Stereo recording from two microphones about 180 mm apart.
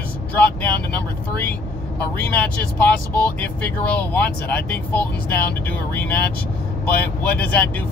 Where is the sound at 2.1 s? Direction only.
10° left (ahead or behind).